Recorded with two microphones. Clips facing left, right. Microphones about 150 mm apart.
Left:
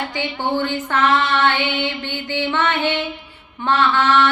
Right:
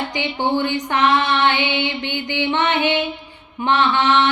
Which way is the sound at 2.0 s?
20° right (ahead or behind).